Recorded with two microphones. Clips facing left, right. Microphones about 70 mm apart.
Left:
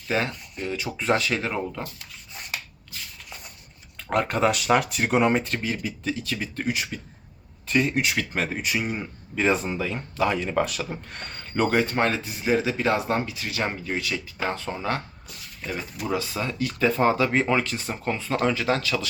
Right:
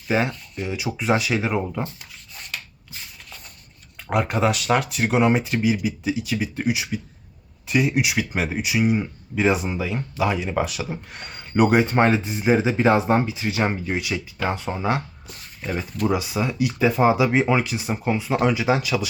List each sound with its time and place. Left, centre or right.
0.1 s speech: centre
2.3 s rub: centre
4.1 s speech: centre
15.6 s speech: centre
16.0 s speech: centre